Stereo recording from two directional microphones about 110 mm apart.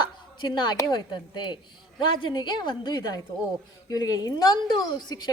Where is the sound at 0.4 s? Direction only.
45° left (ahead or behind).